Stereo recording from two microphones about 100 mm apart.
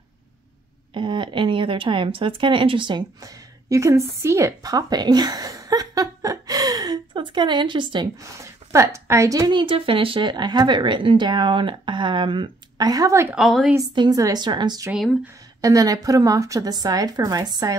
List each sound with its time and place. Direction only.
0.9 s speech: 55° right (ahead or behind)
3.2 s a sound: 35° right (ahead or behind)
7.2 s speech: 50° right (ahead or behind)
8.2 s speech: 30° right (ahead or behind)
9.5 s speech: 60° right (ahead or behind); by 13.1 s 40° right (ahead or behind)
13.3 s a woman's voice: centre (ahead or behind)
13.9 s speech: 40° right (ahead or behind)
15.6 s a woman's voice: 35° right (ahead or behind)